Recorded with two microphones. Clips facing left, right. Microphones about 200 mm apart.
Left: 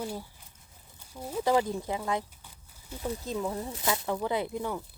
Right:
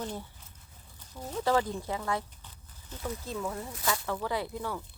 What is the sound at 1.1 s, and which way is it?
Speech, 10° left (ahead or behind).